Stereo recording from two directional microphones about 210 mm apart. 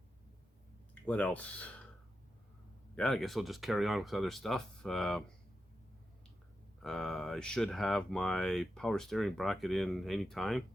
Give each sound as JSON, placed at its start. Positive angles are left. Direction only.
{"t": 1.0, "sound": "speech", "side_deg": 5}
{"t": 2.9, "sound": "speech", "side_deg": 0}
{"t": 6.8, "sound": "speech", "side_deg": 0}